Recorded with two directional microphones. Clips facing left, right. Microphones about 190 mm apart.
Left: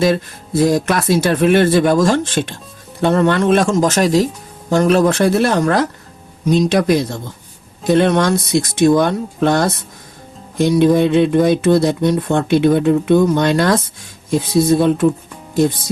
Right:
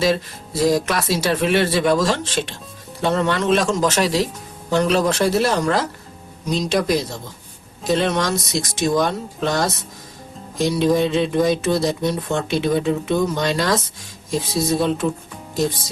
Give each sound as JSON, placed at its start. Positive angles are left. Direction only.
{"t": 0.0, "sound": "speech", "side_deg": 55}